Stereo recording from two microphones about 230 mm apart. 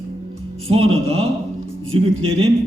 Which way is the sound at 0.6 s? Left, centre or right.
Right.